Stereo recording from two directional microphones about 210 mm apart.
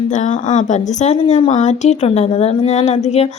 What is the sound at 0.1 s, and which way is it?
A woman's voice, 35° left (ahead or behind).